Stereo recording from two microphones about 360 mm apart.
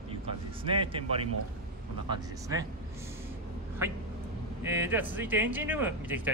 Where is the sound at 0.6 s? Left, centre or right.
Centre.